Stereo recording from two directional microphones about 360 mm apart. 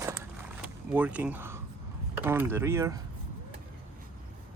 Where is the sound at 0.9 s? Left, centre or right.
Centre.